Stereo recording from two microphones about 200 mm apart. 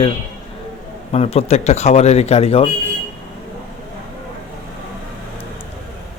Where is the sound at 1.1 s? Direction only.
30° left (ahead or behind).